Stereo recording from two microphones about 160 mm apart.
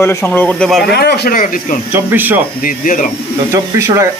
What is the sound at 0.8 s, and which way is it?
Speech, 85° left.